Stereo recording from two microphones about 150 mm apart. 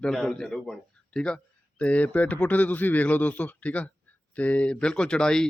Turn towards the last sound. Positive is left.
turn(degrees=5)  # may be behind; listen again after turning